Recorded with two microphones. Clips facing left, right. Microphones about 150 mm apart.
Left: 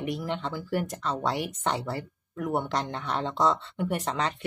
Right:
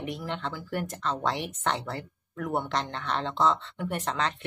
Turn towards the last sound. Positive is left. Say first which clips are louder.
# left 1 dB
turn(degrees=10)  # may be behind; listen again after turning